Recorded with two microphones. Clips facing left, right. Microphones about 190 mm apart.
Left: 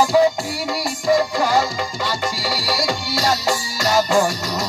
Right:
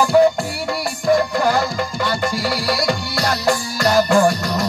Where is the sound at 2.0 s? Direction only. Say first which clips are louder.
Right 4 dB; 55° right (ahead or behind).